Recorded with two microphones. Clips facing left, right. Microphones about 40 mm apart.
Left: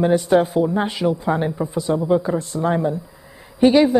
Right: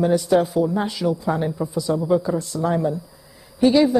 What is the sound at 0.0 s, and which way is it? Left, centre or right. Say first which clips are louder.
A woman's voice: left 2 dB; left.